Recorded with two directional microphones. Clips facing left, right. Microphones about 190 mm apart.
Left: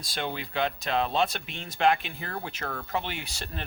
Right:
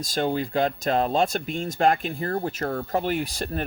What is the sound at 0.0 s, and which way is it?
Speech, 45° right (ahead or behind).